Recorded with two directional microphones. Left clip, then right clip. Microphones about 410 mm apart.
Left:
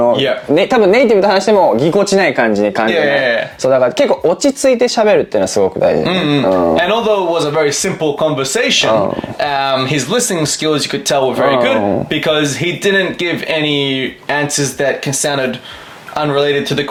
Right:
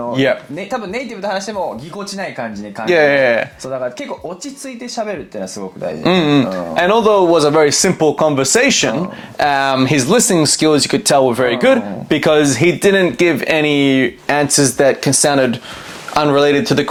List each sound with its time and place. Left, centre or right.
0.1 s speech: right
0.5 s speech: left
2.8 s speech: right
3.6 s speech: left
6.0 s speech: centre